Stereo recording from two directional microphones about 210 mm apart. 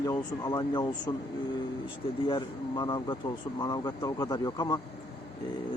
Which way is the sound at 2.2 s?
20° left (ahead or behind).